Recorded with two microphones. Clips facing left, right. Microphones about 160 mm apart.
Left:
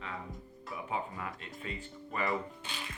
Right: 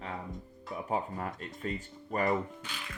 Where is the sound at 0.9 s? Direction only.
40° right (ahead or behind).